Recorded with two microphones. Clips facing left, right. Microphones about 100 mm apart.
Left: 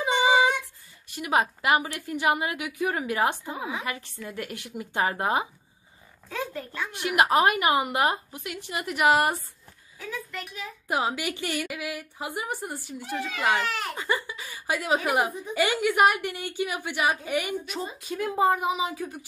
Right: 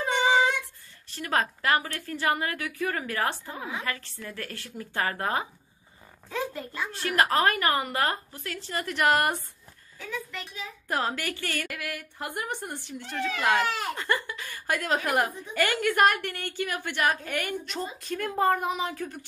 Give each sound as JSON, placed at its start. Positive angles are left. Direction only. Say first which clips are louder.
{"t": 0.0, "sound": "a sound", "louder": "left 2 dB", "side_deg": 10}
{"t": 1.0, "sound": "a woman's voice", "louder": "left 3 dB", "side_deg": 15}
{"t": 6.2, "sound": "a child's voice", "louder": "right 1 dB", "side_deg": -5}
{"t": 6.9, "sound": "a woman's voice", "louder": "left 3 dB", "side_deg": 15}
{"t": 13.6, "sound": "a child's voice", "louder": "right 2 dB", "side_deg": -20}
{"t": 13.9, "sound": "a woman's voice", "louder": "even", "side_deg": 10}